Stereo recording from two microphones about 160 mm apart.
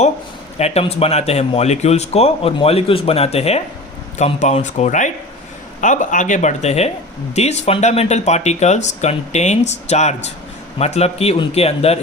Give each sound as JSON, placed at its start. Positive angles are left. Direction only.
{"t": 0.6, "sound": "speech", "side_deg": 40}